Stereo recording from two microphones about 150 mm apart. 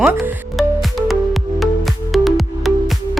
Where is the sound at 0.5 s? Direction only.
Centre (ahead or behind).